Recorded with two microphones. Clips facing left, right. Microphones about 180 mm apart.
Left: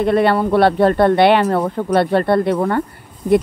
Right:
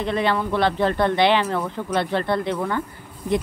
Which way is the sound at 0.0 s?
55° left (ahead or behind).